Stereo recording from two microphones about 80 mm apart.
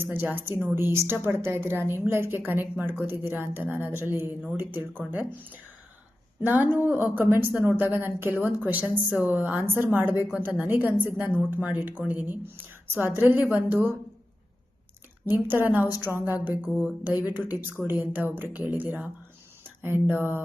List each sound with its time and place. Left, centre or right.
0.0 s a woman's voice: right
15.3 s a woman's voice: right
20.1 s a woman's voice: right